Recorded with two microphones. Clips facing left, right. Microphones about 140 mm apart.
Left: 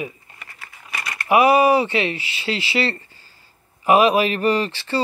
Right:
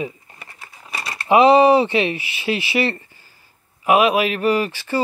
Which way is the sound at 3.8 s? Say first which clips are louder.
Left 1 dB; centre (ahead or behind).